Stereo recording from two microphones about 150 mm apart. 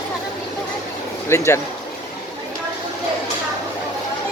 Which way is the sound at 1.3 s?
20° left (ahead or behind).